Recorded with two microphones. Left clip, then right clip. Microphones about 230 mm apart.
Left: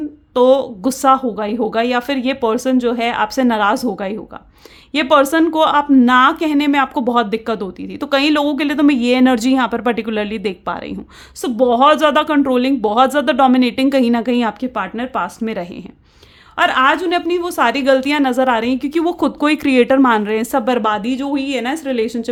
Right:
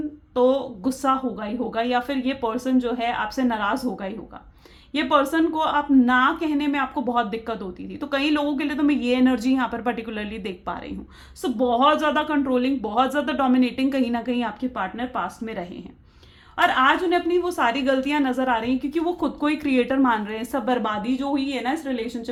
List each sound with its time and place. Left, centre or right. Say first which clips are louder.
0.3 s a woman's voice: left 8 dB; left